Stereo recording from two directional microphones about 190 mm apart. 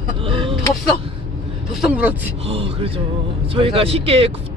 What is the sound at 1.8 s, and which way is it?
Speech, 5° right (ahead or behind).